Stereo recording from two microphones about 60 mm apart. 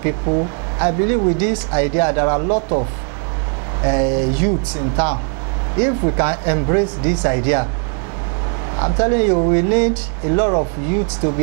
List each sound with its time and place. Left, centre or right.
0.3 s speech: right
3.8 s speech: right
8.7 s speech: right